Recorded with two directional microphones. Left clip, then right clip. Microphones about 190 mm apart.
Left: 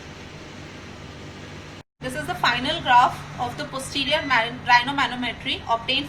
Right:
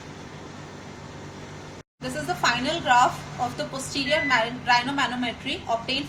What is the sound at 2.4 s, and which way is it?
A woman's voice, 35° right (ahead or behind).